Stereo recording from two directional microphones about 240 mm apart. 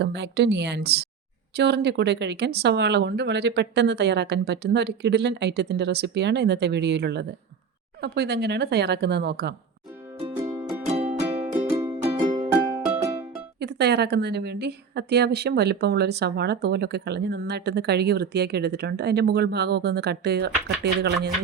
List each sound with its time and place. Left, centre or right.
0.0 s a woman's voice: right
10.2 s music: right
10.4 s music: centre
10.9 s music: right
12.5 s music: centre
13.6 s a woman's voice: right